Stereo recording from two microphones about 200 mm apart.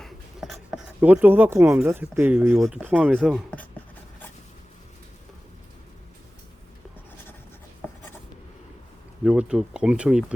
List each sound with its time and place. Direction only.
0.0 s writing: centre (ahead or behind)
1.0 s speech: 10° right (ahead or behind)
2.6 s speech: centre (ahead or behind)
7.8 s writing: 10° left (ahead or behind)
9.2 s speech: 5° right (ahead or behind)